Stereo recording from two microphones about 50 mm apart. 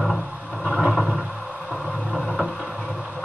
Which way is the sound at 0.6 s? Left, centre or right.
Right.